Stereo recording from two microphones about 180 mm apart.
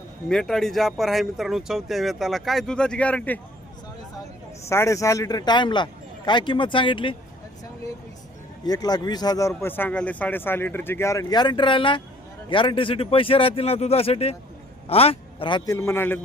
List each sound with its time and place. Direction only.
0.3 s speech: centre (ahead or behind)
4.7 s speech: 15° left (ahead or behind)
8.6 s a man's voice: 20° left (ahead or behind)